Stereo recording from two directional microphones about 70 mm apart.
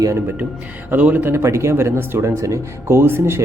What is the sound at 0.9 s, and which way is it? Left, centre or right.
Speech, right.